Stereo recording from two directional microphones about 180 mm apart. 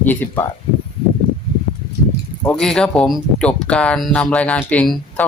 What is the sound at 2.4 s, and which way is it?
Speech, 5° left (ahead or behind).